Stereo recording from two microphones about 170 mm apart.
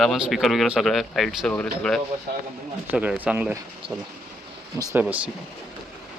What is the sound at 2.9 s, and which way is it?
Speech, 10° right (ahead or behind).